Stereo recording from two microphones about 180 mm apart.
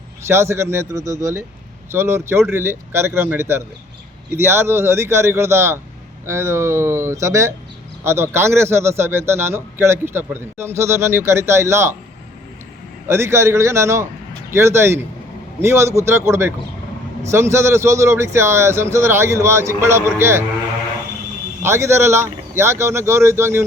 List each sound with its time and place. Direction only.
0.3 s a man's voice: 15° right (ahead or behind)
13.1 s a man's voice: 15° right (ahead or behind)
21.6 s a man's voice: 15° right (ahead or behind)